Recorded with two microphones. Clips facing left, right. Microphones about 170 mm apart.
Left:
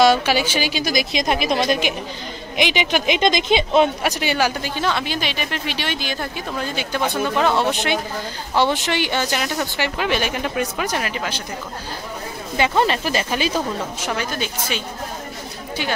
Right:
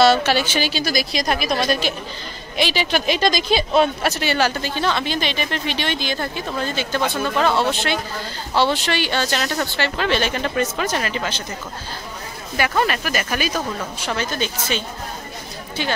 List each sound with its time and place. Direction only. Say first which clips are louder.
0.0 s speech: even; 10° left (ahead or behind)
12.5 s a woman's voice: left 2 dB; 25° left (ahead or behind)
14.1 s speech: right 3 dB; 10° left (ahead or behind)